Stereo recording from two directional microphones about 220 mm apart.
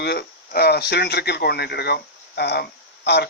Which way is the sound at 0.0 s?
45° left (ahead or behind).